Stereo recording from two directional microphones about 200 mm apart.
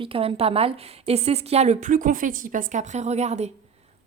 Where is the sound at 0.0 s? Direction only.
30° right (ahead or behind).